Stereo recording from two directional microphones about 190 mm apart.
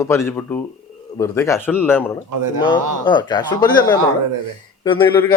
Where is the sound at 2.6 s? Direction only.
25° left (ahead or behind).